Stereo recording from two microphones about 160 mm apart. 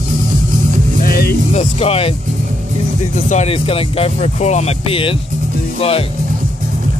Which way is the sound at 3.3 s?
40° left (ahead or behind).